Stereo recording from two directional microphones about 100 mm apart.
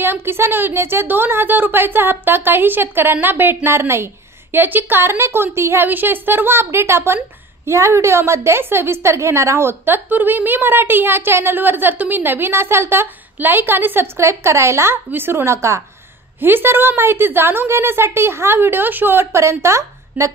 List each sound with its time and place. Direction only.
0.0 s a woman's voice: 20° right (ahead or behind)